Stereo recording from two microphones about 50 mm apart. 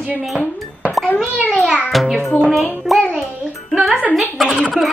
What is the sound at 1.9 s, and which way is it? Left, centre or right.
Speech, centre.